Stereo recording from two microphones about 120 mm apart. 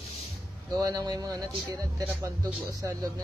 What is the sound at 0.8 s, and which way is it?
Speech, 35° right (ahead or behind).